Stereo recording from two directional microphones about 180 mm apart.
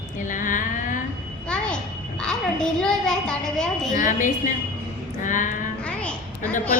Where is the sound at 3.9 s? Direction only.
45° left (ahead or behind).